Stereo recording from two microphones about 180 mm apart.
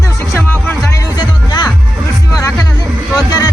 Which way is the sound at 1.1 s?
25° left (ahead or behind).